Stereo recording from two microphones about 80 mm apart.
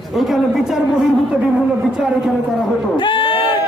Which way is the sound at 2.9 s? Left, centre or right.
Left.